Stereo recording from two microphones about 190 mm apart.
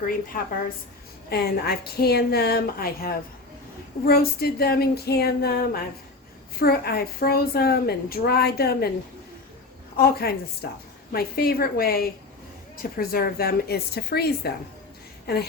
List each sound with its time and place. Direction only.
1.3 s a woman's voice: 55° left (ahead or behind)
10.0 s a woman's voice: 55° left (ahead or behind)